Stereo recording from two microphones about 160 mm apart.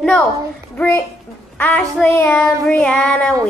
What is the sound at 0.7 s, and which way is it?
Female singing, 10° left (ahead or behind).